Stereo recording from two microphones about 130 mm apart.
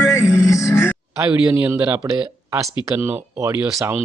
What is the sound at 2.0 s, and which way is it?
Speech, 20° right (ahead or behind).